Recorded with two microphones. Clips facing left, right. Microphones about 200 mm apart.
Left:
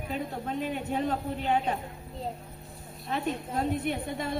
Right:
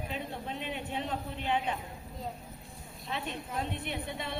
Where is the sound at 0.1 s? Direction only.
45° left (ahead or behind).